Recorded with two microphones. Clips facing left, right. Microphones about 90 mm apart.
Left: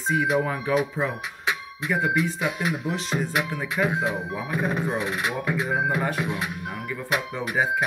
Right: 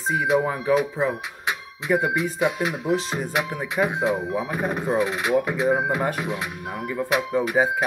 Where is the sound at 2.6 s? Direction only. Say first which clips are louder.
Right 4 dB; 30° right (ahead or behind).